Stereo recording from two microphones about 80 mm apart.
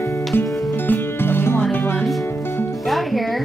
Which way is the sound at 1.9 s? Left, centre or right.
Centre.